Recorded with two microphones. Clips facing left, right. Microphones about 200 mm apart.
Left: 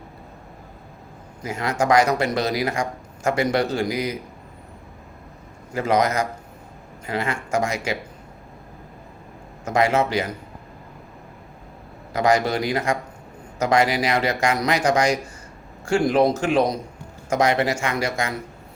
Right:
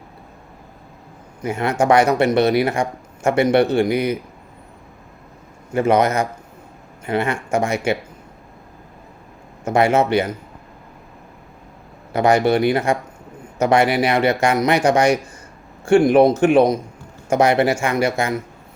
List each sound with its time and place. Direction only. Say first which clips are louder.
1.5 s speech: right 4 dB; 25° right (ahead or behind)
5.7 s speech: right 4 dB; 30° right (ahead or behind)
9.6 s speech: right 4 dB; 30° right (ahead or behind)
12.1 s speech: right 4 dB; 30° right (ahead or behind)